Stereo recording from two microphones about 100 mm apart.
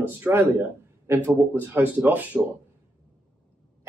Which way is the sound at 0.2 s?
20° right (ahead or behind).